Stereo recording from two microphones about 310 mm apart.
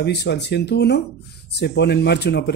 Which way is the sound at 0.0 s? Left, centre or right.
Left.